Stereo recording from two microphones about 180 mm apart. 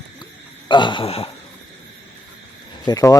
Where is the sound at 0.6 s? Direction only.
25° left (ahead or behind).